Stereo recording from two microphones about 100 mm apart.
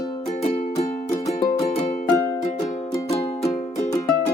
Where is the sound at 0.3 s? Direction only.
90° left.